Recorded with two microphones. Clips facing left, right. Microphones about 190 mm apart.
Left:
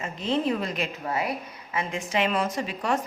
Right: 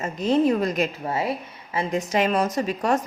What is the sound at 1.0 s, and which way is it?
A woman's voice, 25° right (ahead or behind).